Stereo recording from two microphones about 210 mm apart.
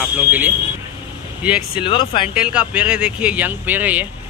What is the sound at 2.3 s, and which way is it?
Speech, 5° right (ahead or behind).